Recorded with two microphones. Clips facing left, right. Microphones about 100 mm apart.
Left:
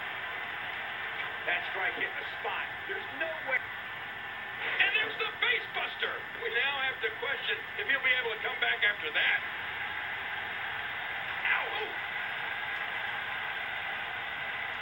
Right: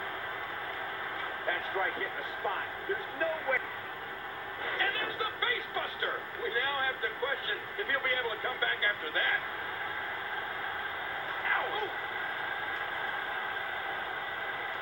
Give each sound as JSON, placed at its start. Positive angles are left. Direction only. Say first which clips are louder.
{"t": 1.5, "sound": "speech", "louder": "right 2 dB", "side_deg": -20}
{"t": 4.6, "sound": "speech", "louder": "even", "side_deg": -25}
{"t": 11.4, "sound": "vehicle", "louder": "right 2 dB", "side_deg": -25}